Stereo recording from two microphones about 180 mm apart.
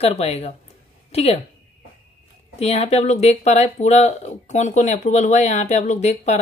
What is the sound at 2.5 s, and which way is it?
Speech, 35° left (ahead or behind).